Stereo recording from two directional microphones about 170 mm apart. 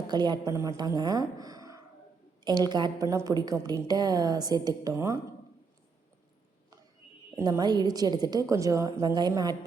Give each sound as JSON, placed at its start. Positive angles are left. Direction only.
{"t": 0.1, "sound": "a woman's voice", "side_deg": -25}
{"t": 7.3, "sound": "a woman's voice", "side_deg": -20}